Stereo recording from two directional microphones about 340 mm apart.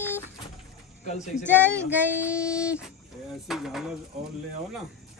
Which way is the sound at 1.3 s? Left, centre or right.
Centre.